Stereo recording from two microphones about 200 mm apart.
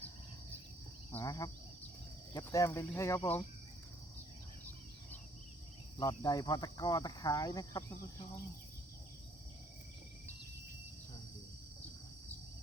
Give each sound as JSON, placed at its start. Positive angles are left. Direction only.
{"t": 1.1, "sound": "speech", "side_deg": 15}
{"t": 6.0, "sound": "cricket", "side_deg": 20}